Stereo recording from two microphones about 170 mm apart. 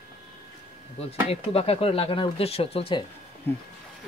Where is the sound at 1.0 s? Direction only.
35° left (ahead or behind).